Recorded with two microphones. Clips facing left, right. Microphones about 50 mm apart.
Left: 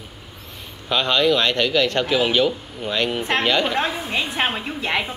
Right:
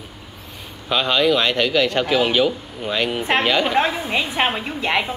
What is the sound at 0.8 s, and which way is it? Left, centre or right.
A man's voice, centre.